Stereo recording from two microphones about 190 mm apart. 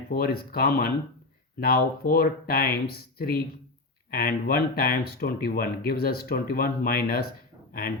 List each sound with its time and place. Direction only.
0.1 s speech: 55° left (ahead or behind)